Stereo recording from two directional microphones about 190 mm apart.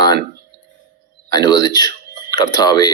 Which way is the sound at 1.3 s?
20° left (ahead or behind).